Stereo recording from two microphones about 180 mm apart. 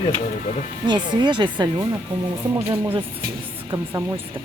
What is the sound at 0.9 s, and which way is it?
Speech, 25° right (ahead or behind).